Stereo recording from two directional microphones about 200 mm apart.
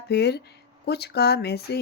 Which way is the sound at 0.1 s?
55° left (ahead or behind).